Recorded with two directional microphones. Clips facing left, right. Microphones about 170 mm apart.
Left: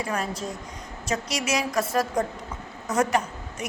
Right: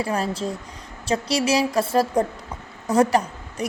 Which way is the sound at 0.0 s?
30° right (ahead or behind).